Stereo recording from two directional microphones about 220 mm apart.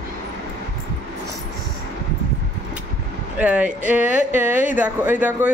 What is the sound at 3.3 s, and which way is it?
Speech, 5° right (ahead or behind).